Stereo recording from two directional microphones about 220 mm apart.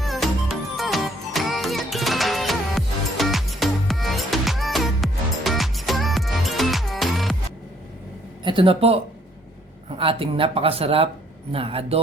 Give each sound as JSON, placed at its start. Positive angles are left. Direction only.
{"t": 0.0, "sound": "music", "side_deg": 0}
{"t": 8.4, "sound": "speech", "side_deg": -25}